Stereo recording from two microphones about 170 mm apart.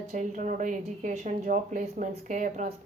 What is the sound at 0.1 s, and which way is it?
A woman's voice, 45° right (ahead or behind).